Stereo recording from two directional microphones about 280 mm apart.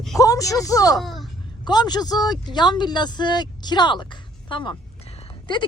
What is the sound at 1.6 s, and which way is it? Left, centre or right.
A woman's voice, centre.